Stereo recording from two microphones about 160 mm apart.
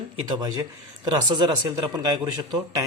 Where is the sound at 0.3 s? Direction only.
25° right (ahead or behind).